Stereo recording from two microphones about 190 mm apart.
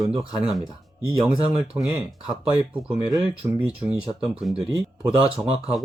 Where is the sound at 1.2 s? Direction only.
5° right (ahead or behind).